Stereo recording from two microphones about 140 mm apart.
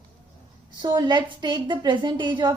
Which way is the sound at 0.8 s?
30° right (ahead or behind).